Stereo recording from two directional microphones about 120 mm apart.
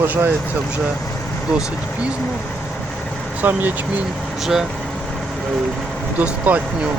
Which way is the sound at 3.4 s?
15° right (ahead or behind).